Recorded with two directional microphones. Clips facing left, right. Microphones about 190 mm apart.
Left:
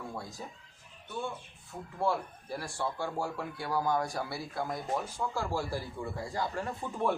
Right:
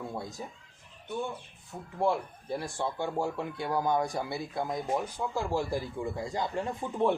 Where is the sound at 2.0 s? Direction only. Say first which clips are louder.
Right 3 dB; 20° right (ahead or behind).